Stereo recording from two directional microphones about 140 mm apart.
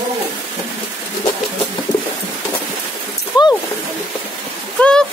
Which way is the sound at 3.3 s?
30° left (ahead or behind).